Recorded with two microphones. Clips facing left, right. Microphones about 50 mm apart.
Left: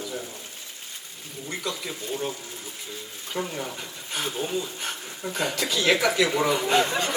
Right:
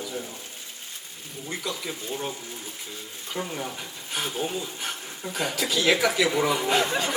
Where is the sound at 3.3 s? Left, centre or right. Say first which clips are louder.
Left 1 dB; centre.